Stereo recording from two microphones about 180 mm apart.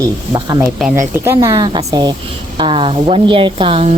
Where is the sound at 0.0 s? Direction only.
20° right (ahead or behind).